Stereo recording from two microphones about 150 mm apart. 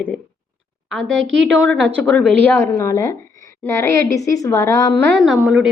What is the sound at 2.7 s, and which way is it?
A woman's voice, 20° left (ahead or behind).